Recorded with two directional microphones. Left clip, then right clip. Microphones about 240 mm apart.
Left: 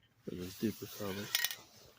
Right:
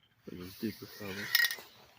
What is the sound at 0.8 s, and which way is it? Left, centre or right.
Speech, left.